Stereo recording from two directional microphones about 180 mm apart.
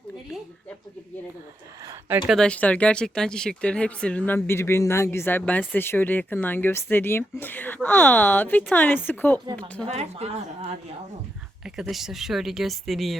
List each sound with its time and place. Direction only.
1.8 s speech: 20° right (ahead or behind)
2.2 s speech: centre (ahead or behind)
9.8 s speech: 35° right (ahead or behind)
11.6 s speech: centre (ahead or behind)